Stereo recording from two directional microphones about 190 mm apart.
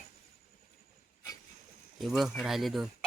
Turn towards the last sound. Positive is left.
turn(degrees=0)  # may be behind; listen again after turning